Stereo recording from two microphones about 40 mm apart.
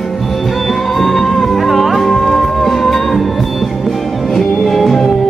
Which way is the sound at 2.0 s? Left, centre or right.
Centre.